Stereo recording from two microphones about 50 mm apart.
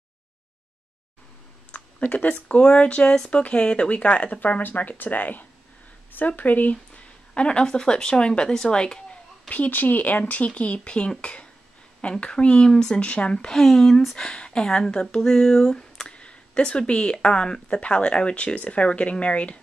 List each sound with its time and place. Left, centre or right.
1.7 s a sound: left
2.1 s speech: left
7.3 s speech: centre
9.5 s speech: left; by 13.6 s centre
13.6 s speech: centre
14.1 s speech: centre